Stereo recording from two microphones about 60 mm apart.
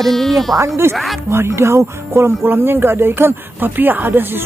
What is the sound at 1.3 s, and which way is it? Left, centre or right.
Speech, right.